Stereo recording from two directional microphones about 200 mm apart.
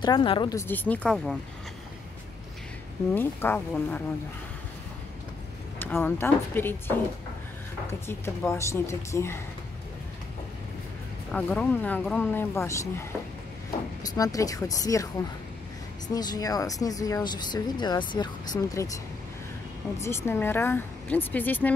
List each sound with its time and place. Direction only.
0.0 s speech: 25° left (ahead or behind); by 1.4 s centre (ahead or behind)
3.2 s speech: 10° left (ahead or behind)
5.8 s speech: 10° left (ahead or behind)
8.1 s speech: 15° left (ahead or behind)
11.3 s speech: 5° left (ahead or behind)
14.0 s speech: 15° left (ahead or behind)
16.1 s speech: 20° left (ahead or behind)
20.0 s speech: 10° left (ahead or behind)